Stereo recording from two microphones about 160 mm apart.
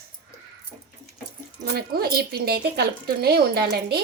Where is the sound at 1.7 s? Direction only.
75° right (ahead or behind).